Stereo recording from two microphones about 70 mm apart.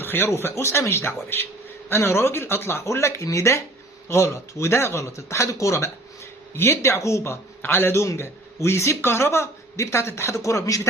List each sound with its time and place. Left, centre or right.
0.0 s a man's voice: left